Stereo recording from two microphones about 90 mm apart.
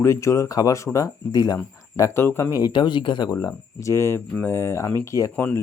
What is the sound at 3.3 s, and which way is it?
Speech, 40° left (ahead or behind).